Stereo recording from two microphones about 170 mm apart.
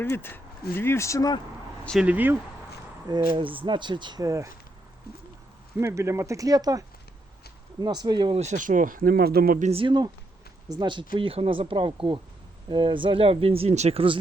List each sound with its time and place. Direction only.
0.0 s speech: 10° left (ahead or behind)
1.8 s speech: 5° left (ahead or behind)
2.0 s speech: 10° right (ahead or behind)
3.1 s speech: 25° right (ahead or behind)
5.1 s a sound: 65° left (ahead or behind)
5.7 s speech: 15° right (ahead or behind)
8.4 s speech: 45° right (ahead or behind)
9.6 s speech: 30° right (ahead or behind)